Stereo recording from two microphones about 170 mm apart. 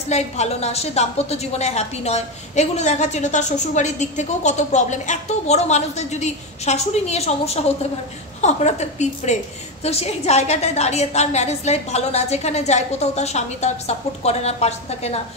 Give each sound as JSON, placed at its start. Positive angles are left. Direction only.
{"t": 0.1, "sound": "a woman's voice", "side_deg": 40}